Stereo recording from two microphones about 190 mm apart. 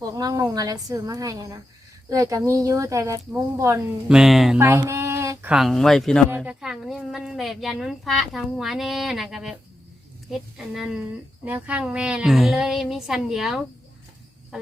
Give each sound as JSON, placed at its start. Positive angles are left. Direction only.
{"t": 0.1, "sound": "speech", "side_deg": -20}
{"t": 4.1, "sound": "a woman's voice", "side_deg": -5}
{"t": 4.6, "sound": "a woman's voice", "side_deg": -15}
{"t": 14.5, "sound": "cricket", "side_deg": -5}